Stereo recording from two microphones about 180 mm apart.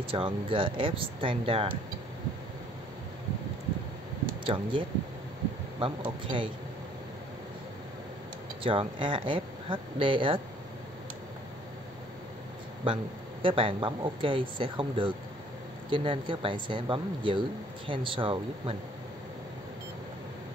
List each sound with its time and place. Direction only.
0.0 s speech: 30° right (ahead or behind)
4.5 s speech: 25° right (ahead or behind)
8.6 s speech: 30° right (ahead or behind)
12.8 s speech: 30° right (ahead or behind)